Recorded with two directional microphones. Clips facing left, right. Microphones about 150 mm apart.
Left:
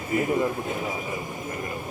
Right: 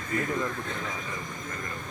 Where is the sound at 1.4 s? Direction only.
20° left (ahead or behind).